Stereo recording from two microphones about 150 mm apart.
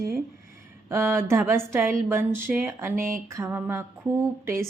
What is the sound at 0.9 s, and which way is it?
A woman's voice, 15° right (ahead or behind).